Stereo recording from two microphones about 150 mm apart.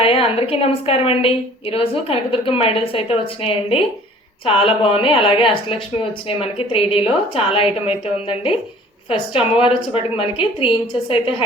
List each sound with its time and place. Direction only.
0.0 s a woman's voice: 40° left (ahead or behind)